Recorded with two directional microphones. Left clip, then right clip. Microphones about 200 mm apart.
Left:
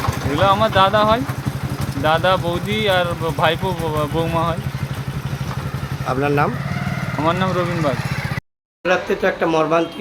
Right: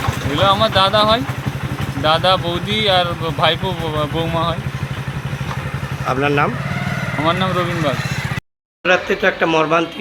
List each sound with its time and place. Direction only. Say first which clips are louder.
0.3 s speech: right 1 dB; centre (ahead or behind)
6.1 s speech: right 2 dB; 5° right (ahead or behind)